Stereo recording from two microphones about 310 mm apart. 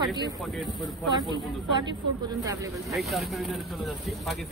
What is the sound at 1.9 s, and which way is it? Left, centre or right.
Speech, centre.